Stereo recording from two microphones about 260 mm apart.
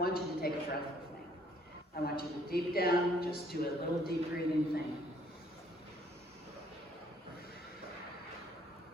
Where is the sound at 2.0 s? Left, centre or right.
Left.